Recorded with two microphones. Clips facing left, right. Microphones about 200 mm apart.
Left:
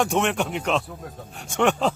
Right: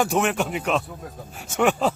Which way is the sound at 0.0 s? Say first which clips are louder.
Right 1 dB; 5° right (ahead or behind).